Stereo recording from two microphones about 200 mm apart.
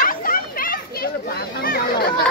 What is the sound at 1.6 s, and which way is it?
Chatter, 50° left (ahead or behind).